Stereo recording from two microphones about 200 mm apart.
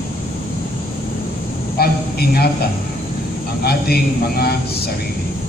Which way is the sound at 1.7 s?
50° left (ahead or behind).